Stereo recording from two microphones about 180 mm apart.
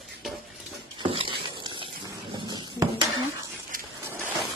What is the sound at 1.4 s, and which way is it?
Dog, 25° right (ahead or behind).